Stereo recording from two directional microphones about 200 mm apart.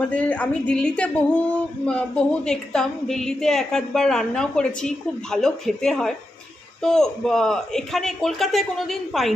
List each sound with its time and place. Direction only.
0.1 s a woman's voice: 5° left (ahead or behind)